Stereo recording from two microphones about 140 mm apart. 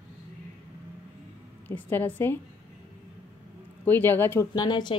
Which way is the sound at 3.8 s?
15° left (ahead or behind).